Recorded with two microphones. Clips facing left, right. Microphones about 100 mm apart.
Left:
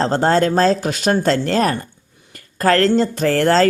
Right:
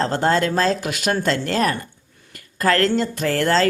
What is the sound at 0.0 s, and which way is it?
Speech, 35° left (ahead or behind).